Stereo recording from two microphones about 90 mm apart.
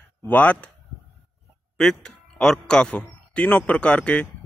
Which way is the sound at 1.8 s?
5° left (ahead or behind).